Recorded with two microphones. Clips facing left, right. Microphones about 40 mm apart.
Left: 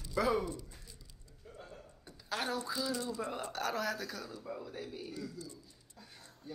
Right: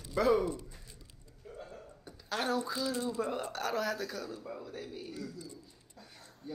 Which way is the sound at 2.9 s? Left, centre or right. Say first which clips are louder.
Right 2 dB; right.